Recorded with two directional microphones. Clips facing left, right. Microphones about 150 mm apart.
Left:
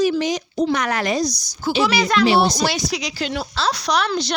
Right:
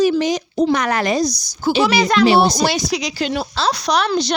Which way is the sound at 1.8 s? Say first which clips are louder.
Right 2 dB; 25° right (ahead or behind).